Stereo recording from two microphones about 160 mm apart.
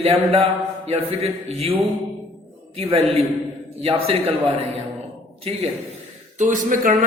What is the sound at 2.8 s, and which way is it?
Speech, 40° right (ahead or behind).